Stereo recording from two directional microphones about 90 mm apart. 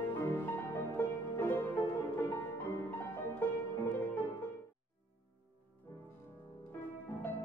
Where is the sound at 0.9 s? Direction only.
20° left (ahead or behind).